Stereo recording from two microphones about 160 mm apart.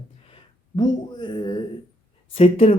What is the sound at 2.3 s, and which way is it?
Speech, 35° left (ahead or behind).